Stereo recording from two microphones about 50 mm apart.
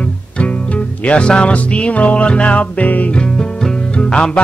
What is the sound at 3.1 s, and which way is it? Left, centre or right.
Music, centre.